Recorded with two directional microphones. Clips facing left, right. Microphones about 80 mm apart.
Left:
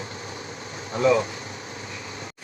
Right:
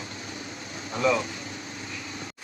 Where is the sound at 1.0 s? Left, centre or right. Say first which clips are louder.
Left 4 dB; left.